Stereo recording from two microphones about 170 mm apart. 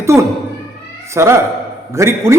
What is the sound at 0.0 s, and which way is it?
Speech, 15° right (ahead or behind).